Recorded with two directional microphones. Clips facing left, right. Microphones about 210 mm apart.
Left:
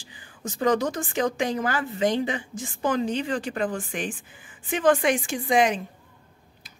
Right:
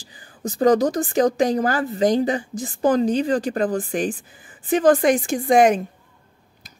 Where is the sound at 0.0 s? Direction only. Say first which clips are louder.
Right 6 dB; 40° right (ahead or behind).